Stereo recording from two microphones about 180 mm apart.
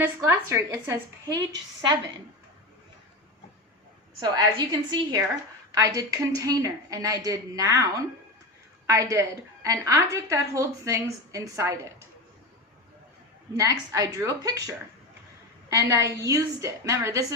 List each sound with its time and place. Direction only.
0.0 s a woman's voice: 15° right (ahead or behind)
4.2 s a woman's voice: 20° right (ahead or behind)
13.6 s a woman's voice: 20° right (ahead or behind)
15.7 s a woman's voice: 20° right (ahead or behind)